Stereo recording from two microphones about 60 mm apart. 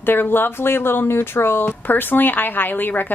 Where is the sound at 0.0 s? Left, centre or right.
Left.